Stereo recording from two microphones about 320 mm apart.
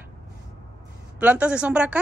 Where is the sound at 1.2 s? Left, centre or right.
Centre.